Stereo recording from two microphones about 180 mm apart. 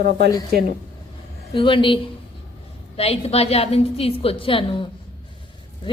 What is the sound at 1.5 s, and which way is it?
A woman's voice, 30° left (ahead or behind).